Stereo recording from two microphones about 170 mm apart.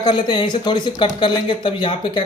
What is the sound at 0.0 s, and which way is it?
Speech, 25° left (ahead or behind).